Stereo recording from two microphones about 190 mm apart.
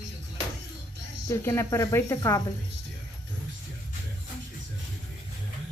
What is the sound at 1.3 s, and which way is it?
Speech, 15° left (ahead or behind).